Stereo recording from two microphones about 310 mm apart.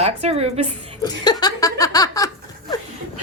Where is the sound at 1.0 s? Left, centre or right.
Centre.